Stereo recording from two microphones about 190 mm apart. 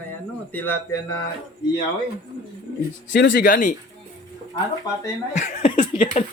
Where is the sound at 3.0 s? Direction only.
75° left (ahead or behind).